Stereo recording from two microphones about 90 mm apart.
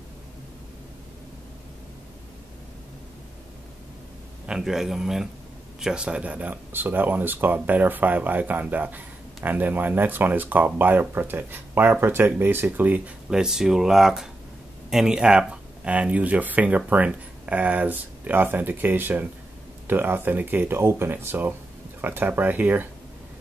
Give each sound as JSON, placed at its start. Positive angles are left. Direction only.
{"t": 4.5, "sound": "speech", "side_deg": -5}
{"t": 13.3, "sound": "speech", "side_deg": -5}